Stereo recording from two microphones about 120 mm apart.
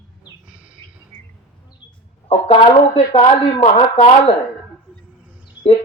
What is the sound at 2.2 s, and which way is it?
Speech, 50° left (ahead or behind).